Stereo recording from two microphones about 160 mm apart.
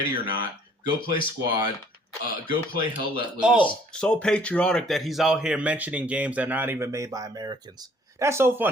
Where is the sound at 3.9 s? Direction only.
5° left (ahead or behind).